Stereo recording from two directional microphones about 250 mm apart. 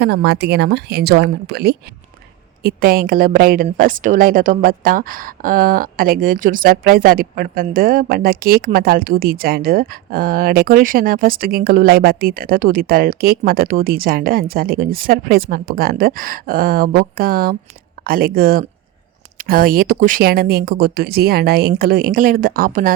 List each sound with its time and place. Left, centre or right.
0.0 s a woman's voice: right